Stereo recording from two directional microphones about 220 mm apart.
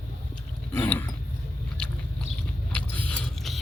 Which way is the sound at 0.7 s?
10° left (ahead or behind).